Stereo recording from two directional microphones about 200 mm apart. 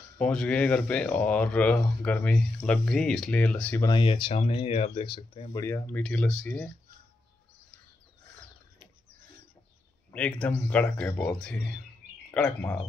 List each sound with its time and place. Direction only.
0.2 s speech: 5° left (ahead or behind)
3.8 s speech: 25° left (ahead or behind); by 6.7 s 5° left (ahead or behind)
10.1 s speech: 5° left (ahead or behind)